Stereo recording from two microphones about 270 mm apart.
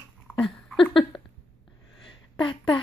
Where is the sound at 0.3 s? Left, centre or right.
Centre.